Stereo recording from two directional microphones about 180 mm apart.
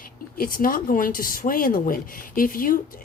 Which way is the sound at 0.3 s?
50° left (ahead or behind).